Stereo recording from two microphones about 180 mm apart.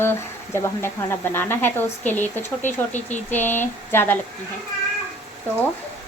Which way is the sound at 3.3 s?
10° left (ahead or behind).